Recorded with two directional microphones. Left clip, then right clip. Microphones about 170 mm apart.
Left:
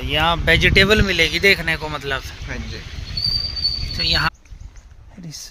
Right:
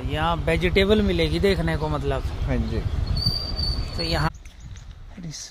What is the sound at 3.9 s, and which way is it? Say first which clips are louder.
Speech: left 7 dB; 20° right (ahead or behind).